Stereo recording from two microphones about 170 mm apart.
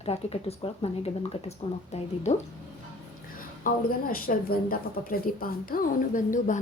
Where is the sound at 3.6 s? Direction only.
60° left (ahead or behind).